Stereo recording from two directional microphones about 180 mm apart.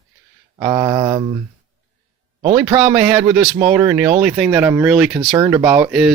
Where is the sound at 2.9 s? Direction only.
10° right (ahead or behind).